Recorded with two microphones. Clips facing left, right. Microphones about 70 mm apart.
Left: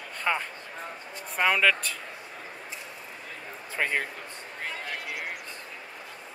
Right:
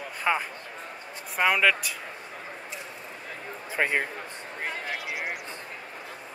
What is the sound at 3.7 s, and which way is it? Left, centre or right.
Speech, centre.